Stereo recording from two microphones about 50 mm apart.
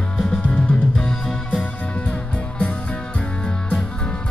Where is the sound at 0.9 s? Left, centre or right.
Centre.